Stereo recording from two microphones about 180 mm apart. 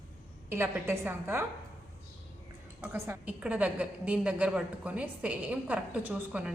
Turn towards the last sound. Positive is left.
turn(degrees=-5)  # may be behind; listen again after turning